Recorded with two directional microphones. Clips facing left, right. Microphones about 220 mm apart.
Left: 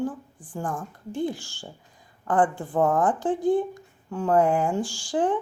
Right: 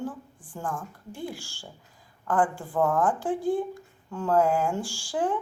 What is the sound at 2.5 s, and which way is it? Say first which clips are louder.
Speech: left 3 dB; 30° left (ahead or behind).